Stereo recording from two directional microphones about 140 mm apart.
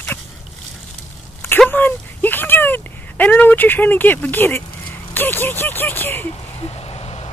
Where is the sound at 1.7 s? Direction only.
15° left (ahead or behind).